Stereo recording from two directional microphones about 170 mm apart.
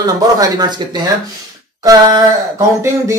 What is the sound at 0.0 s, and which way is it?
Speech, 25° right (ahead or behind).